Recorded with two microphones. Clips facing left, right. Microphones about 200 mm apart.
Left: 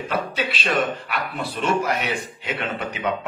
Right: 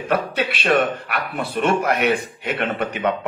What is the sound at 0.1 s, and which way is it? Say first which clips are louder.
A man's voice: right 5 dB; 60° right (ahead or behind).